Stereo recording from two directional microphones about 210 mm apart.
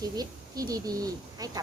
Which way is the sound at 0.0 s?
15° right (ahead or behind).